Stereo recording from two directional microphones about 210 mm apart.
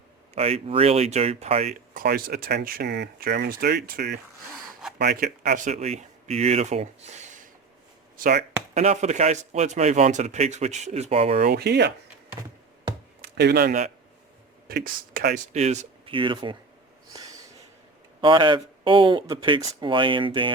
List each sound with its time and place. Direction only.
0.3 s speech: 30° right (ahead or behind)
1.9 s speech: 45° right (ahead or behind)
8.1 s speech: 45° right (ahead or behind)
8.7 s speech: 30° right (ahead or behind)
11.4 s speech: 50° right (ahead or behind)
13.2 s speech: 50° right (ahead or behind)
15.5 s speech: 30° right (ahead or behind)
17.1 s snort: 15° right (ahead or behind)
18.2 s speech: 20° right (ahead or behind)